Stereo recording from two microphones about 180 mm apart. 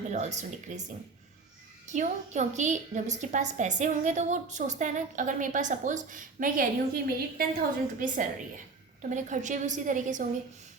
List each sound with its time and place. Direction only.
0.1 s speech: 40° right (ahead or behind)
1.9 s a woman's voice: 40° right (ahead or behind)